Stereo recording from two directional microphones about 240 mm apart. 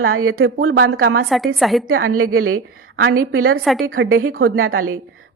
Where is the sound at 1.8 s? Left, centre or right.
Right.